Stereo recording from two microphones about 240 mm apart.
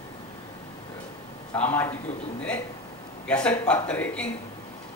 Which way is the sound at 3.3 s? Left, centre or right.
Centre.